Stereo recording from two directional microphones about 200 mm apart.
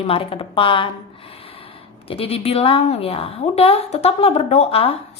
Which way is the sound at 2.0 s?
30° left (ahead or behind).